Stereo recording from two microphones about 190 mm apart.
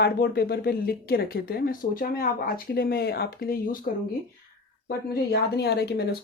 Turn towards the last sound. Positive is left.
turn(degrees=60)  # may be behind; listen again after turning